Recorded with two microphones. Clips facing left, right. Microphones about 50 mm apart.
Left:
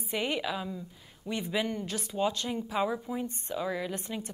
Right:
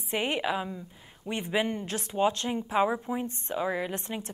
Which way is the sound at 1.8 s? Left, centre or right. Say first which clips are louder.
Right 2 dB; right.